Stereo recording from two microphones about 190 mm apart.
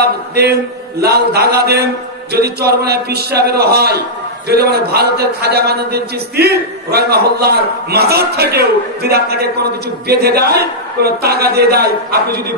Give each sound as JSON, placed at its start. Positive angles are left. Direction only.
{"t": 0.0, "sound": "a man's voice", "side_deg": -55}